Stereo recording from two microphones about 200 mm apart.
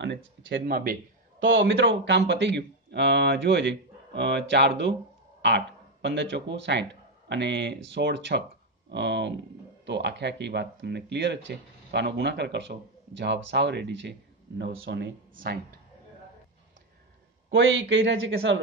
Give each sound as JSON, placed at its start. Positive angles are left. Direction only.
{"t": 0.5, "sound": "speech", "side_deg": -60}
{"t": 1.4, "sound": "speech", "side_deg": -75}
{"t": 6.0, "sound": "speech", "side_deg": -60}
{"t": 17.5, "sound": "speech", "side_deg": -75}